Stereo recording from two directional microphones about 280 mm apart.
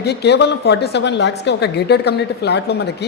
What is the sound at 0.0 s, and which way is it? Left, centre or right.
A woman's voice, left.